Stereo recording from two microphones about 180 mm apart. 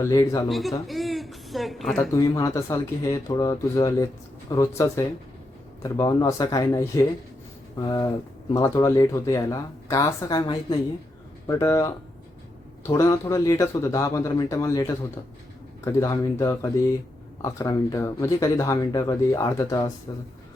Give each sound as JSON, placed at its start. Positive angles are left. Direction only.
{"t": 0.0, "sound": "speech", "side_deg": 20}
{"t": 0.9, "sound": "a sound", "side_deg": 0}
{"t": 2.1, "sound": "speech", "side_deg": 20}